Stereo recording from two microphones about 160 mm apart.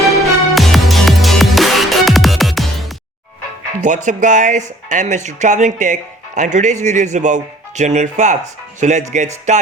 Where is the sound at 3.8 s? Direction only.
50° right (ahead or behind).